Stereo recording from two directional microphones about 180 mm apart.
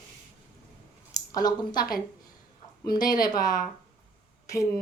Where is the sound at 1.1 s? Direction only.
20° left (ahead or behind).